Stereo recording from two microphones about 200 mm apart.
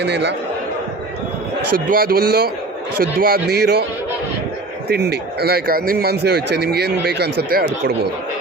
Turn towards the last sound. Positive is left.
turn(degrees=-50)  # may be behind; listen again after turning